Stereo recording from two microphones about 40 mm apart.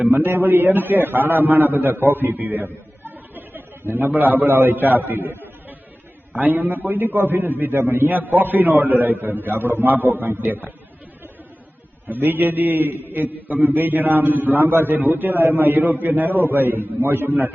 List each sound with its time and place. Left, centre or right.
0.1 s a man's voice: right
6.3 s a man's voice: right
6.7 s a man's voice: right
12.0 s a man's voice: right